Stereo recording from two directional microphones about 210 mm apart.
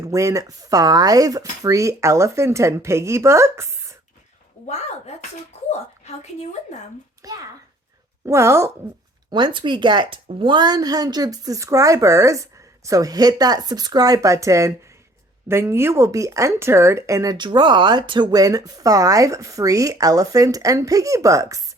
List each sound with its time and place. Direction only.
0.0 s speech: 15° right (ahead or behind)
4.6 s a woman's voice: 30° left (ahead or behind)
7.2 s speech: 15° right (ahead or behind)